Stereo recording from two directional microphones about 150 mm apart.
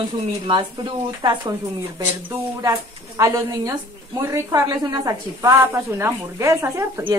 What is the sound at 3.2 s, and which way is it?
A woman's voice, 20° right (ahead or behind).